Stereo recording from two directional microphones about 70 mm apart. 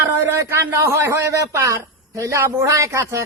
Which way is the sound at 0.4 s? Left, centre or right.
Right.